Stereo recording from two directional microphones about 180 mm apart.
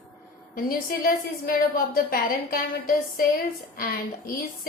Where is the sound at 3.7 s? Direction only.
50° left (ahead or behind).